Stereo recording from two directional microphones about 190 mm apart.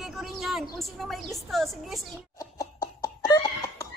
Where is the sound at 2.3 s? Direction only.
15° left (ahead or behind).